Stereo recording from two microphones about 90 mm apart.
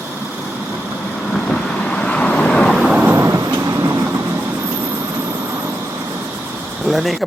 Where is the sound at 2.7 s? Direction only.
5° right (ahead or behind).